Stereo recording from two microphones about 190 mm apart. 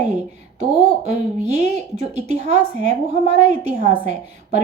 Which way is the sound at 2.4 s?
40° right (ahead or behind).